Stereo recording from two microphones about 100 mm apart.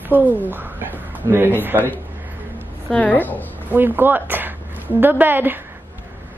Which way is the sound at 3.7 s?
20° right (ahead or behind).